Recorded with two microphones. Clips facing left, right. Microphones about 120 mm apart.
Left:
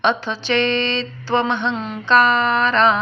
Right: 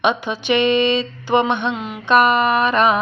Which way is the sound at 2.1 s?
15° right (ahead or behind).